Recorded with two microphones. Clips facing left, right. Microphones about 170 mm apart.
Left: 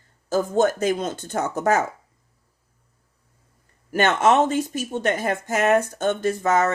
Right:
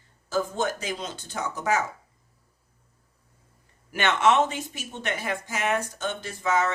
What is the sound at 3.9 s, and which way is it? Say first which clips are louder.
Speech: left 4 dB; 45° left (ahead or behind).